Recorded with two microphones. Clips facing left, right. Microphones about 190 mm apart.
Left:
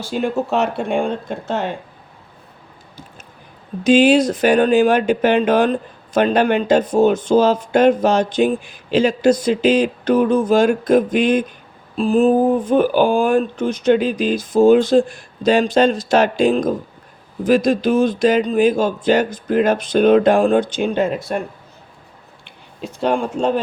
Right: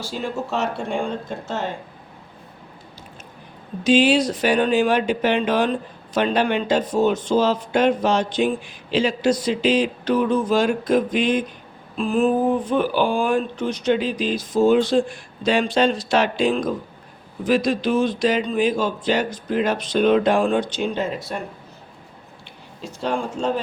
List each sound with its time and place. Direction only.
0.0 s speech: 60° left (ahead or behind)
3.8 s speech: 50° left (ahead or behind)
11.9 s speech: 35° left (ahead or behind); by 21.3 s 55° left (ahead or behind)
22.8 s speech: 60° left (ahead or behind)